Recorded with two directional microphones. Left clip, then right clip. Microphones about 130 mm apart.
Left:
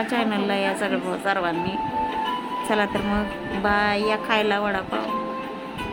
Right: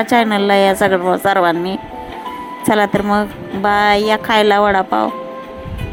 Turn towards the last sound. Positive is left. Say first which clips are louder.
# right 11 dB
turn(degrees=-65)  # may be behind; listen again after turning